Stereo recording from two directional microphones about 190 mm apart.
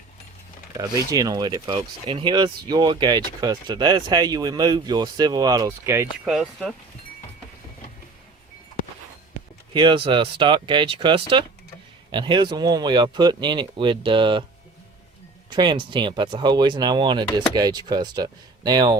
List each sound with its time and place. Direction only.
0.8 s speech: 20° right (ahead or behind)
6.2 s speech: centre (ahead or behind)
9.7 s speech: 25° right (ahead or behind)
15.4 s speech: 25° right (ahead or behind)